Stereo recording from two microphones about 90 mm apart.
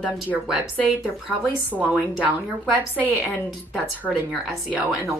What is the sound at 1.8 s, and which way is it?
A woman's voice, 15° right (ahead or behind).